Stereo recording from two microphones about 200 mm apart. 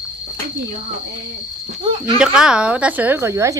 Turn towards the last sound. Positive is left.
turn(degrees=-15)  # may be behind; listen again after turning